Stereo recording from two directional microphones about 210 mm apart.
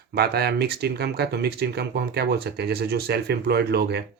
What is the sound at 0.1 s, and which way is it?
Speech, 50° right (ahead or behind).